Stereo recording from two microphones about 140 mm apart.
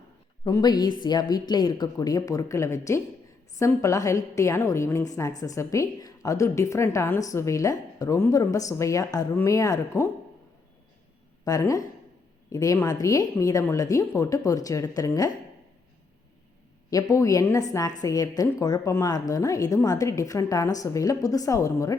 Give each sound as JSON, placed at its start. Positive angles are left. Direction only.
{"t": 0.4, "sound": "a woman's voice", "side_deg": 30}
{"t": 11.4, "sound": "a woman's voice", "side_deg": 25}
{"t": 16.9, "sound": "a woman's voice", "side_deg": 25}